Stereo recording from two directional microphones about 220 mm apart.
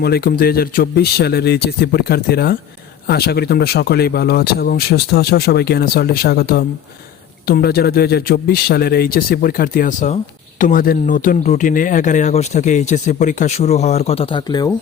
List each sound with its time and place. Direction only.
0.0 s speech: 45° left (ahead or behind); by 14.8 s 15° left (ahead or behind)